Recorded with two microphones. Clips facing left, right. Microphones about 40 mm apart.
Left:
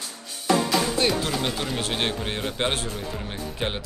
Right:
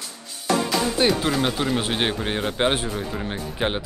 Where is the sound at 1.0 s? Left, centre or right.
Centre.